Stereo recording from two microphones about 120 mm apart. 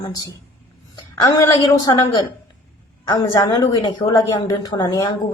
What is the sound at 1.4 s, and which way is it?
Speech, 30° left (ahead or behind).